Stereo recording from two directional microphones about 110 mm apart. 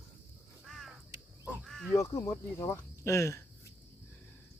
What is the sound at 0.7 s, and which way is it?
Crow, centre (ahead or behind).